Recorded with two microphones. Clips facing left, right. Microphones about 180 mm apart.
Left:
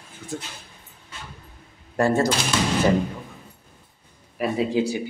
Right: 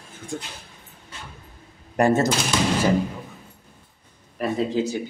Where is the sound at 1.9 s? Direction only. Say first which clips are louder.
Right 1 dB; 20° right (ahead or behind).